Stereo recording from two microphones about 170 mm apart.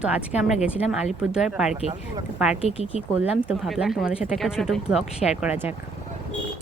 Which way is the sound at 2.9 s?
10° right (ahead or behind).